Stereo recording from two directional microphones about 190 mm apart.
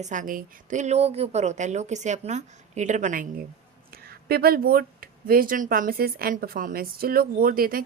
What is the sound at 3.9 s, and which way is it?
Speech, 55° right (ahead or behind).